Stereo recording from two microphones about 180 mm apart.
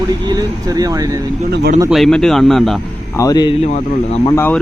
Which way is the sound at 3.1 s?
20° left (ahead or behind).